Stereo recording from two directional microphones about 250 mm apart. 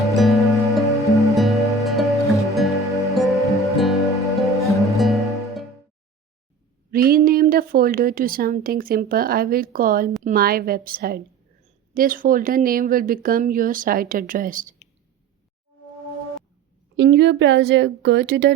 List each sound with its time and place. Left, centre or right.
0.1 s music: centre
6.9 s a woman's voice: right
17.0 s speech: right